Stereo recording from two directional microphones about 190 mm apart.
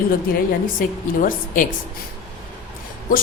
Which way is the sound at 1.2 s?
45° left (ahead or behind).